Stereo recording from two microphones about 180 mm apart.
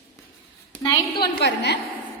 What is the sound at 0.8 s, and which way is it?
Speech, 25° left (ahead or behind).